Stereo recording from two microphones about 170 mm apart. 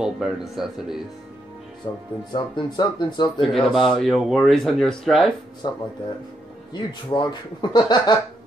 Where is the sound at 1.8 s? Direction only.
25° left (ahead or behind).